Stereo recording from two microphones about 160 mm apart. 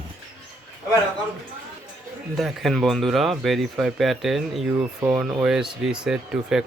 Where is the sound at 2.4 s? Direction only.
Centre (ahead or behind).